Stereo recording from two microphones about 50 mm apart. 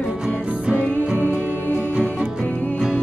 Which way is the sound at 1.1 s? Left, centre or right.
Right.